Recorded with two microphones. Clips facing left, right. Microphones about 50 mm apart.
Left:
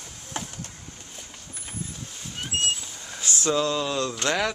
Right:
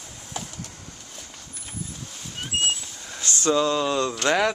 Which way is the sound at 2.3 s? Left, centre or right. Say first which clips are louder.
Right 1 dB; centre.